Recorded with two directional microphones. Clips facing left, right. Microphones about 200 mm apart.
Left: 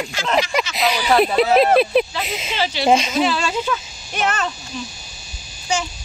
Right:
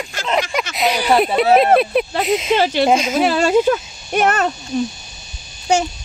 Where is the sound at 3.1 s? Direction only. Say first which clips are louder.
Right 6 dB; 50° right (ahead or behind).